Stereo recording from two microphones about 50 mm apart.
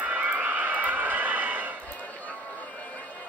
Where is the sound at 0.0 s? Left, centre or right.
Right.